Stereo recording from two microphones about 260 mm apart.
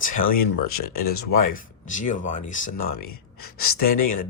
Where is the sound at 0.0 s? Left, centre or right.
Left.